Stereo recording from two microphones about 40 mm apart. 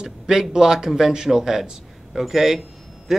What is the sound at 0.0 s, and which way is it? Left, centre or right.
Speech, centre.